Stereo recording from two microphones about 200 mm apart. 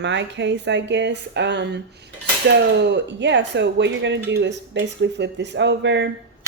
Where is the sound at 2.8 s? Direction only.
60° right (ahead or behind).